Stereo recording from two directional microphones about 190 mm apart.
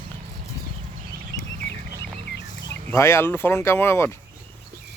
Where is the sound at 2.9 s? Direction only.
15° left (ahead or behind).